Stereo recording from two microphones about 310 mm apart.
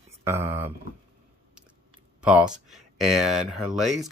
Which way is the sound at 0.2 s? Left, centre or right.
Centre.